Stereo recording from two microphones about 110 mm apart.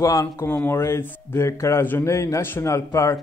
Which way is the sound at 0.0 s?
30° left (ahead or behind).